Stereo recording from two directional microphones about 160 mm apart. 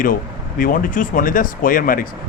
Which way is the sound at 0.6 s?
60° left (ahead or behind).